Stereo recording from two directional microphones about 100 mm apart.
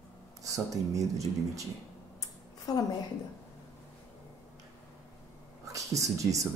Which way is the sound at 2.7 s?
40° left (ahead or behind).